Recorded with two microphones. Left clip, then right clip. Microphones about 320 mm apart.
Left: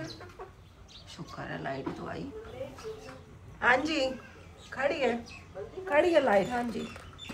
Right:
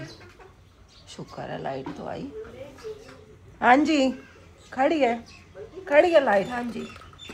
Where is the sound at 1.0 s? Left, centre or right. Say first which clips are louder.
Right 5 dB; centre.